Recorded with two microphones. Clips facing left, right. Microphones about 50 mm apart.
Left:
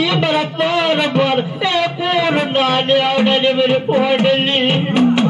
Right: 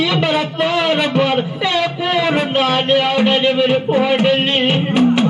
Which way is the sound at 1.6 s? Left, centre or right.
Left.